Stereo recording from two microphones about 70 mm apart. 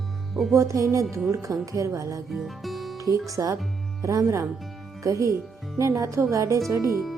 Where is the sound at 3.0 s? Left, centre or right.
Right.